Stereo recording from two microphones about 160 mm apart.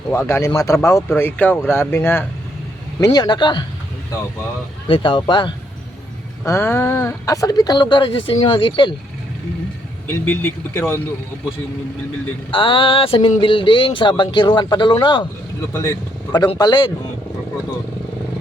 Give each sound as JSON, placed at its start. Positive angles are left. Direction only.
{"t": 0.1, "sound": "speech", "side_deg": 15}
{"t": 3.0, "sound": "speech", "side_deg": 25}
{"t": 4.9, "sound": "speech", "side_deg": 30}
{"t": 6.4, "sound": "speech", "side_deg": 15}
{"t": 10.1, "sound": "speech", "side_deg": 15}
{"t": 12.5, "sound": "speech", "side_deg": 30}
{"t": 15.7, "sound": "speech", "side_deg": 15}